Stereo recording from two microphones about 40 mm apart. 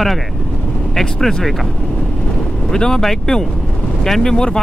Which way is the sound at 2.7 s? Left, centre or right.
Centre.